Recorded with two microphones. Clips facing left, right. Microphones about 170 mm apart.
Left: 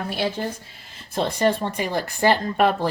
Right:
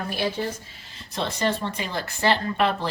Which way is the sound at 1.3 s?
50° left (ahead or behind).